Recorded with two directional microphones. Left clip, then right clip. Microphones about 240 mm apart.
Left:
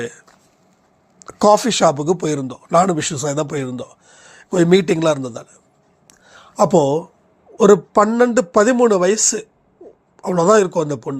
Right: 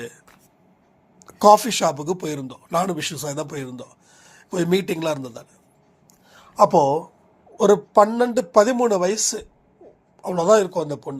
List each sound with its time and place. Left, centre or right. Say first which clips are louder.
0.0 s speech: left 8 dB; left
6.2 s a sound: even; left
7.5 s speech: left 4 dB; left